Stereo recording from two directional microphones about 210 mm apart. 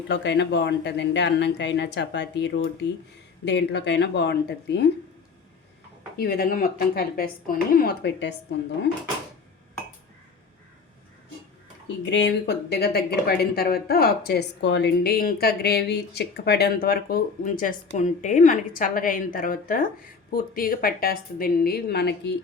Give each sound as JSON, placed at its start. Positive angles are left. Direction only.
{"t": 0.1, "sound": "speech", "side_deg": 55}
{"t": 6.1, "sound": "speech", "side_deg": 45}
{"t": 12.0, "sound": "speech", "side_deg": 55}